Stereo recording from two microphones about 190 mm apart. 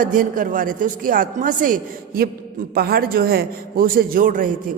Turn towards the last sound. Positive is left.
turn(degrees=-45)  # may be behind; listen again after turning